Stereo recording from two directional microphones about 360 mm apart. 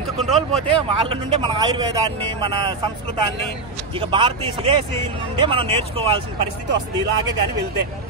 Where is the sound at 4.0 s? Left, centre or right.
Centre.